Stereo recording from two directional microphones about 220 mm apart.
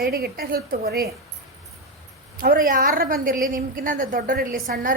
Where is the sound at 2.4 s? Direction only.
40° right (ahead or behind).